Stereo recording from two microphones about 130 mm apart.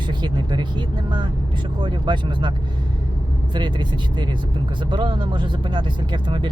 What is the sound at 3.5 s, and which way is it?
Speech, 35° right (ahead or behind).